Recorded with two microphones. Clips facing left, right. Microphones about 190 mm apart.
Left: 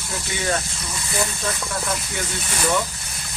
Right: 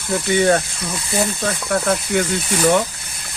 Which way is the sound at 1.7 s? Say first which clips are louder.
Right 9 dB; 60° right (ahead or behind).